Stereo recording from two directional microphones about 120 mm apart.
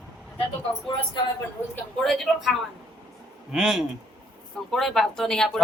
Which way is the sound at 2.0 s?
5° left (ahead or behind).